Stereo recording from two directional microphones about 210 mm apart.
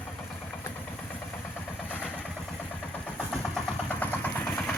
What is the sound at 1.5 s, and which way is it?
Vehicle, 5° left (ahead or behind).